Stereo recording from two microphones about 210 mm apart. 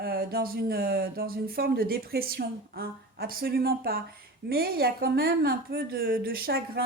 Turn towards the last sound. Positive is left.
turn(degrees=-45)  # may be behind; listen again after turning